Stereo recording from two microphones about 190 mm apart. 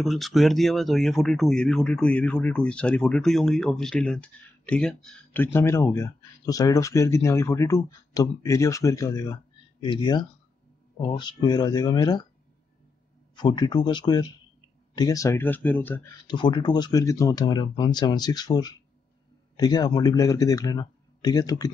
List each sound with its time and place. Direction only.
0.0 s speech: centre (ahead or behind); by 12.3 s 20° left (ahead or behind)
13.4 s speech: 25° left (ahead or behind)
16.3 s speech: 25° left (ahead or behind)